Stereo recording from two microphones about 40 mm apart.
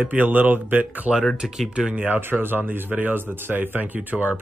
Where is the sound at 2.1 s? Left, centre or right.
Right.